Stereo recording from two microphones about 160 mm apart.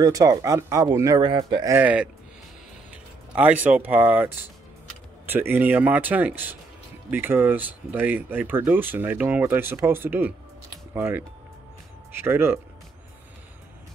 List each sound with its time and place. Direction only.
0.0 s speech: 20° right (ahead or behind)
1.7 s speech: 10° right (ahead or behind)
3.3 s speech: 10° right (ahead or behind)